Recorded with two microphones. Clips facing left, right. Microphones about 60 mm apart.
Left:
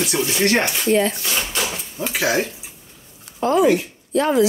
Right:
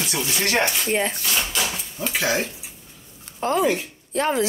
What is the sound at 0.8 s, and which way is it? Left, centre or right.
Speech, centre.